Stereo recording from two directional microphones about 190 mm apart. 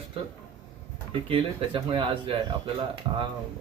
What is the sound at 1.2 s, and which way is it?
Speech, 30° right (ahead or behind).